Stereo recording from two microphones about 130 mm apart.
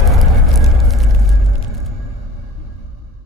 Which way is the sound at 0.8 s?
Centre (ahead or behind).